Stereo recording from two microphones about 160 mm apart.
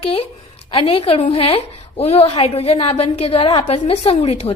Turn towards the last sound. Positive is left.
turn(degrees=40)  # may be behind; listen again after turning